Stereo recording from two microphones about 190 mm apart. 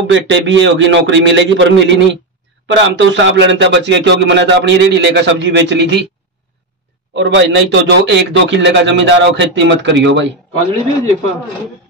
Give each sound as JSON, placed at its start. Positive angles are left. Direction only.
{"t": 0.0, "sound": "a man's voice", "side_deg": -75}
{"t": 7.2, "sound": "a man's voice", "side_deg": -85}